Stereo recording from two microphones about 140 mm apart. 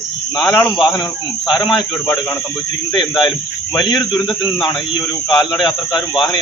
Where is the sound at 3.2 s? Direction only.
30° left (ahead or behind).